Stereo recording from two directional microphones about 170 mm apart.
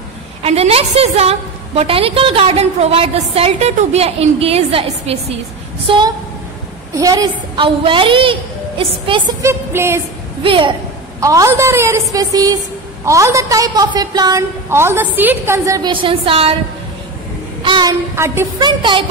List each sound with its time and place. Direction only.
0.4 s a woman's voice: 35° right (ahead or behind)
5.9 s a woman's voice: 25° right (ahead or behind)
9.4 s a woman's voice: 15° right (ahead or behind)
10.4 s a woman's voice: 30° right (ahead or behind)
11.1 s a woman's voice: 20° right (ahead or behind)
15.9 s a woman's voice: 30° right (ahead or behind)
17.6 s child singing: 25° right (ahead or behind)
18.1 s a woman's voice: 15° right (ahead or behind)